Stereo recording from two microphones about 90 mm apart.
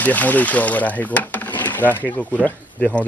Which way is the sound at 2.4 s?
5° left (ahead or behind).